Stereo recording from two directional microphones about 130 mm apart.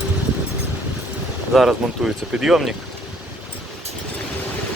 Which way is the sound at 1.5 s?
Centre (ahead or behind).